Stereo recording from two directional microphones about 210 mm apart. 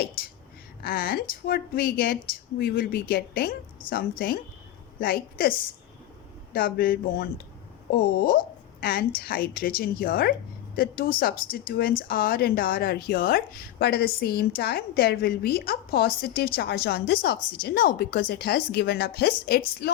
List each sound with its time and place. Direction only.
0.8 s speech: 45° left (ahead or behind)